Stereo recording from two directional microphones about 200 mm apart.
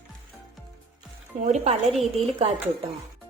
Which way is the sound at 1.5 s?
35° right (ahead or behind).